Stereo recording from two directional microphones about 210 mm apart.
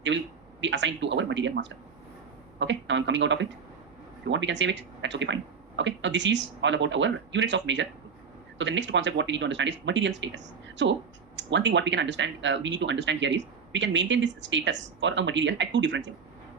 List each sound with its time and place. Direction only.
0.6 s speech: 60° right (ahead or behind)
2.6 s speech: 60° right (ahead or behind)